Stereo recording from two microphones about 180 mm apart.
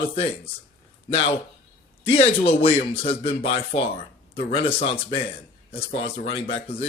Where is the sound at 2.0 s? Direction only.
30° left (ahead or behind).